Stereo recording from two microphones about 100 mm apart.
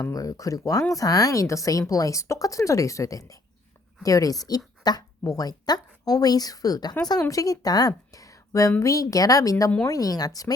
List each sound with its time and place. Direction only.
0.1 s a woman's voice: 35° left (ahead or behind)